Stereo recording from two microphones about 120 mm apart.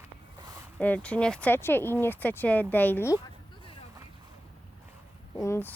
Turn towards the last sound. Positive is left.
turn(degrees=20)  # may be behind; listen again after turning